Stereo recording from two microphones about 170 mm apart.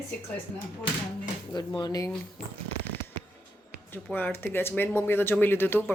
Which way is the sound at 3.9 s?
10° left (ahead or behind).